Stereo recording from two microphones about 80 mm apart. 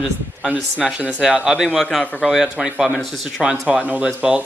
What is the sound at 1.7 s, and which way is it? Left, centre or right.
A man's voice, centre.